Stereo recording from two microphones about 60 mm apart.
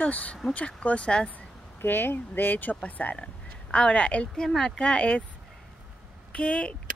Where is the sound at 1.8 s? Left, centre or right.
Left; by 4.3 s centre.